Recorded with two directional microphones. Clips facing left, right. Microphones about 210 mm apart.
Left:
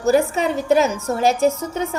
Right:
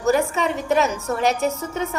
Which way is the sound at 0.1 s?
35° left (ahead or behind).